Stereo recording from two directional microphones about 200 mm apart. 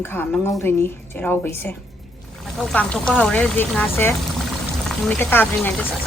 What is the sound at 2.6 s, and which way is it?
Speech, 5° left (ahead or behind).